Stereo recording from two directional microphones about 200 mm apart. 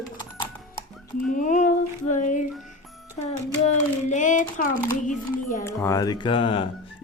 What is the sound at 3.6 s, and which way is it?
Speech, 40° left (ahead or behind).